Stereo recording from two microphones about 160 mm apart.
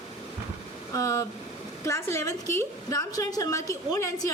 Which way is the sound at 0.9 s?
20° left (ahead or behind).